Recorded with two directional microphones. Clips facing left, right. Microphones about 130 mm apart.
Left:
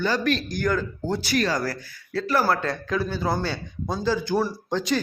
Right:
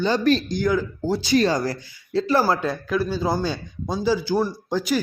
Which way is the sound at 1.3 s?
25° right (ahead or behind).